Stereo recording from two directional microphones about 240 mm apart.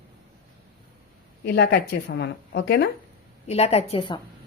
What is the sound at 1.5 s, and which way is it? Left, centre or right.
A woman's voice, left.